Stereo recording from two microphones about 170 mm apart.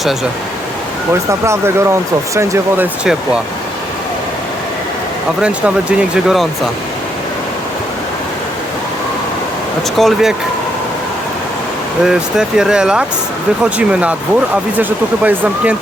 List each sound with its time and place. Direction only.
1.3 s speech: 15° right (ahead or behind)
5.4 s speech: 5° right (ahead or behind)
10.0 s speech: centre (ahead or behind)
12.0 s speech: 5° right (ahead or behind)